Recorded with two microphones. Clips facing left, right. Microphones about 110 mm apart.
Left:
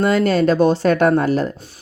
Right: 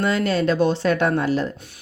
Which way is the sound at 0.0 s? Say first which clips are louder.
Left 5 dB; 45° left (ahead or behind).